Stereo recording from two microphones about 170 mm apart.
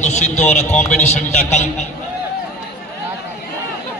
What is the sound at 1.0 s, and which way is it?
Speech, 40° left (ahead or behind).